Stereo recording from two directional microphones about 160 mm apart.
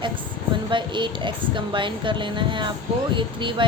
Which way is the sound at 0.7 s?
30° right (ahead or behind).